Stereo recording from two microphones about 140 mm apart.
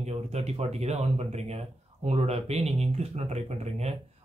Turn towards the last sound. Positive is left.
turn(degrees=-50)  # may be behind; listen again after turning